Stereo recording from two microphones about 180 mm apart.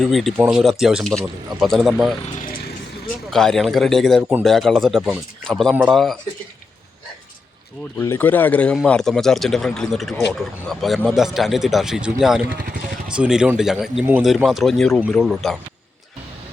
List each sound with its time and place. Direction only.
0.0 s speech: centre (ahead or behind)
2.2 s vehicle: 40° left (ahead or behind)
3.2 s speech: centre (ahead or behind)
7.9 s speech: 15° left (ahead or behind)